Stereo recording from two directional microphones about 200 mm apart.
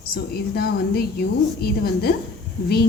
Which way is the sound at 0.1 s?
50° left (ahead or behind).